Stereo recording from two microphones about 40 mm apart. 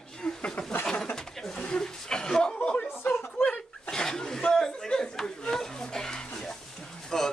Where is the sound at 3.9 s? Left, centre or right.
Centre.